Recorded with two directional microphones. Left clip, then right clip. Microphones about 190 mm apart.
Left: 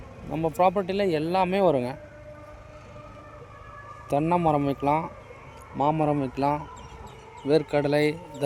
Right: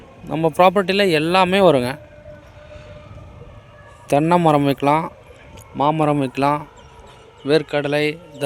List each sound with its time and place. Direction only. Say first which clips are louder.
0.3 s a man's voice: right 8 dB; 25° right (ahead or behind)
4.1 s a man's voice: right 8 dB; 20° right (ahead or behind); by 8.6 s 5° right (ahead or behind)